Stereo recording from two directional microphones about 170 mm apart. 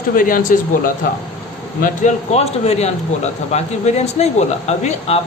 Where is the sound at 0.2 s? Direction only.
55° left (ahead or behind).